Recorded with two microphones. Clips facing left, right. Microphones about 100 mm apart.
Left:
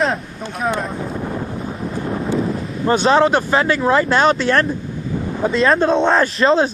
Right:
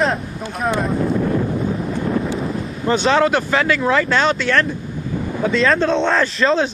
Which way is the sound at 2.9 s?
35° left (ahead or behind).